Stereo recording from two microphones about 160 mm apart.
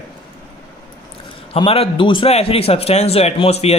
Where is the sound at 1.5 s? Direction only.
35° left (ahead or behind).